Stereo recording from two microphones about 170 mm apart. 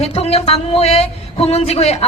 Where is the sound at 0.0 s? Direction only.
35° left (ahead or behind).